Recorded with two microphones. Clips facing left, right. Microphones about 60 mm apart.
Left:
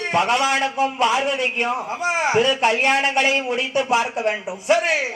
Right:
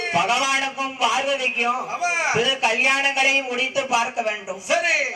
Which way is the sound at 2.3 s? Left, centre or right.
Left.